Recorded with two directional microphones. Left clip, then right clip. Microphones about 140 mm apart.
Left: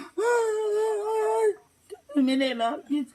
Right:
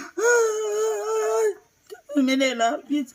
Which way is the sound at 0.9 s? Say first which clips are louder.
Right 2 dB; 25° right (ahead or behind).